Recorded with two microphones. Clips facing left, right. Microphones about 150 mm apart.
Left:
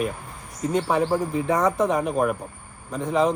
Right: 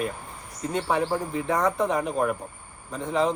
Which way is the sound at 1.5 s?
20° left (ahead or behind).